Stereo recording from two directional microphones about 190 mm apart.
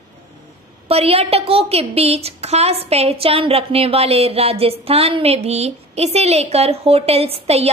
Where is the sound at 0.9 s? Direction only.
30° right (ahead or behind).